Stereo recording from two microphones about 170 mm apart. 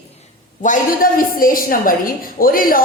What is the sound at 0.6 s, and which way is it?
A woman's voice, 55° left (ahead or behind).